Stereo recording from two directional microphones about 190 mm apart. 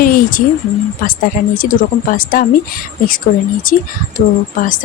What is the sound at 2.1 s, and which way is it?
Speech, 45° left (ahead or behind).